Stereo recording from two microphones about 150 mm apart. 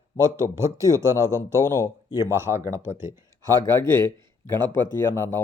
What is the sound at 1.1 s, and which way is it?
Speech, 20° left (ahead or behind).